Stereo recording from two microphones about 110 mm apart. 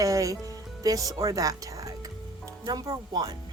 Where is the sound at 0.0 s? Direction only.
30° right (ahead or behind).